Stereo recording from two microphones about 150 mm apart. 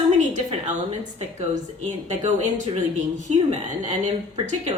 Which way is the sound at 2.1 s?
50° right (ahead or behind).